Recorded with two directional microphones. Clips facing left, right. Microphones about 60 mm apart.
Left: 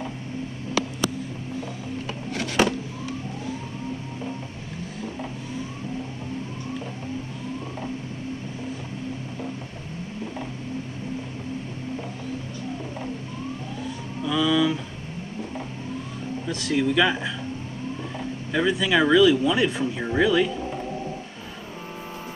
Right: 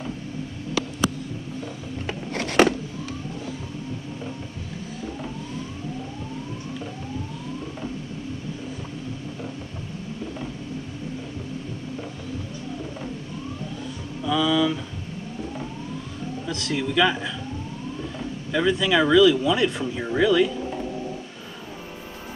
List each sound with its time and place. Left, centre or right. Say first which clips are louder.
2.0 s a sound: right 3 dB; right
14.2 s music: even; centre
16.4 s speech: left 4 dB; centre
18.5 s speech: right 1 dB; centre